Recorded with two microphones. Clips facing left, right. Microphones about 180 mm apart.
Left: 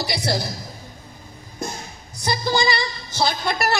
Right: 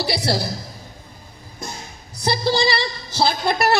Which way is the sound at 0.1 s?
35° right (ahead or behind).